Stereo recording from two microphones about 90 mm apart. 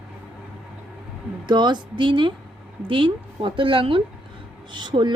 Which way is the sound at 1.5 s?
55° right (ahead or behind).